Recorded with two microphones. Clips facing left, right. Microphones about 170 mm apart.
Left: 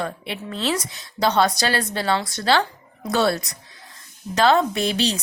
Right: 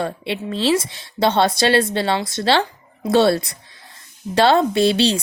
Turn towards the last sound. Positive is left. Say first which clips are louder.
# right 6 dB
turn(degrees=-30)  # may be behind; listen again after turning